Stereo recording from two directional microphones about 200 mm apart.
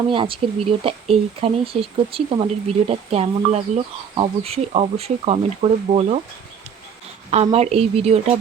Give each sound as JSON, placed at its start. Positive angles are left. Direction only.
{"t": 0.1, "sound": "speech", "side_deg": -25}
{"t": 7.3, "sound": "speech", "side_deg": -30}